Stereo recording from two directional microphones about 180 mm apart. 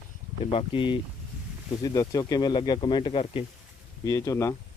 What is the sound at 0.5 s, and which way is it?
Speech, 30° left (ahead or behind).